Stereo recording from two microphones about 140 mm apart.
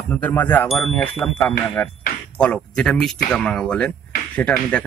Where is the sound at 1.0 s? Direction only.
10° left (ahead or behind).